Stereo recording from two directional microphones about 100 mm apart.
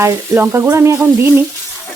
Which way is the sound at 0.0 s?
30° right (ahead or behind).